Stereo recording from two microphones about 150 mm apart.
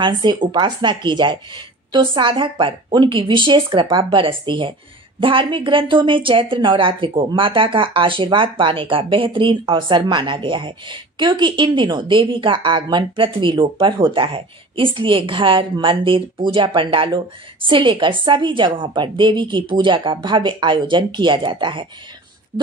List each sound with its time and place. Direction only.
0.0 s a woman's voice: 30° right (ahead or behind)